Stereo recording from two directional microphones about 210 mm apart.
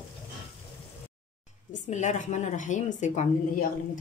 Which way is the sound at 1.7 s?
35° left (ahead or behind).